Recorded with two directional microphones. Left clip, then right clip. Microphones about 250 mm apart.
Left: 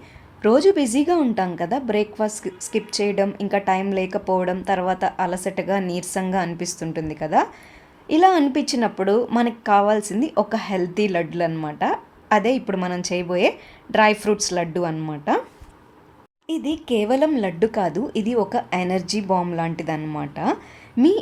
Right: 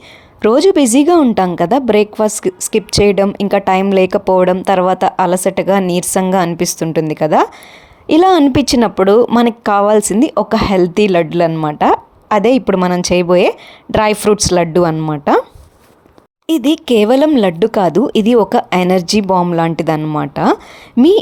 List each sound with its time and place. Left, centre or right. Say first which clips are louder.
0.4 s speech: right 7 dB; right
16.5 s speech: right 11 dB; right